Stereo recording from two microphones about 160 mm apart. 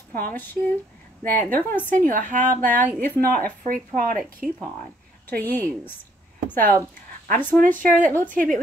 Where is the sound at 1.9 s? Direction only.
55° right (ahead or behind).